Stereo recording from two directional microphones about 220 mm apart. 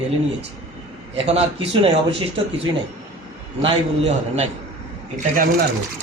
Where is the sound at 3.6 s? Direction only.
30° right (ahead or behind).